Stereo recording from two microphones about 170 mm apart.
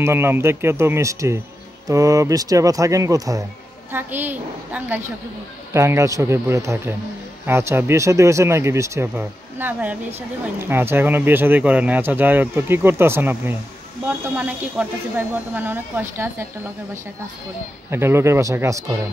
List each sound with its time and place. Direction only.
0.0 s speech: 15° right (ahead or behind)
17.8 s speech: 15° right (ahead or behind)